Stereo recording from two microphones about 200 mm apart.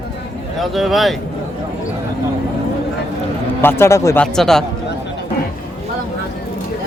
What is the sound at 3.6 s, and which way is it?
Speech, 15° left (ahead or behind).